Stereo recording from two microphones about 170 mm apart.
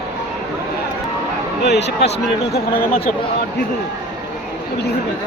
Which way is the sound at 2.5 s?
65° left (ahead or behind).